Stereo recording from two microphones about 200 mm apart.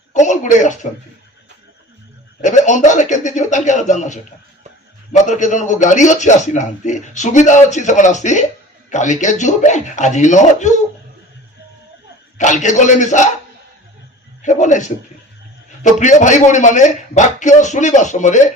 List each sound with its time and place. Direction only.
0.1 s a man's voice: 35° left (ahead or behind)
2.4 s a man's voice: 35° left (ahead or behind)
12.4 s a man's voice: 35° left (ahead or behind)
14.4 s a man's voice: 40° left (ahead or behind)